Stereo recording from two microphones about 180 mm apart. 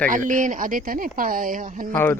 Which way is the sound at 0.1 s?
45° right (ahead or behind).